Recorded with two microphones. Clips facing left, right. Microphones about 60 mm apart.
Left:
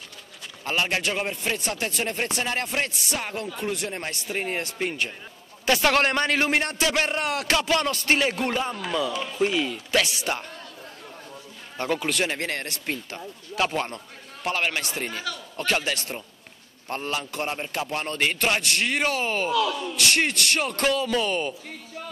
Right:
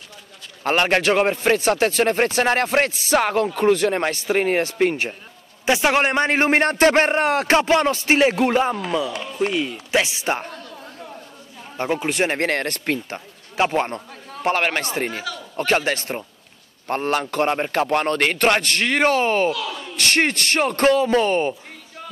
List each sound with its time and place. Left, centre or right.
0.7 s a man's voice: right
1.3 s a man's voice: right
1.6 s a man's voice: right
5.7 s a man's voice: centre
6.3 s a man's voice: right; by 8.4 s centre
8.5 s a man's voice: right
9.4 s speech: centre
9.9 s speech: right
11.7 s speech: right
12.3 s a man's voice: right
13.1 s a man's voice: right